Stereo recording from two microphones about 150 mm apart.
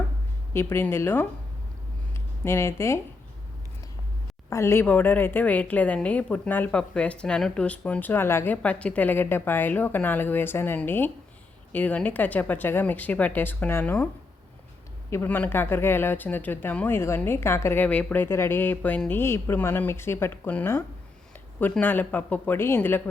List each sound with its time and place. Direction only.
0.5 s speech: 15° left (ahead or behind)
2.4 s speech: 20° left (ahead or behind)
4.4 s speech: 20° left (ahead or behind)
15.1 s speech: 15° left (ahead or behind)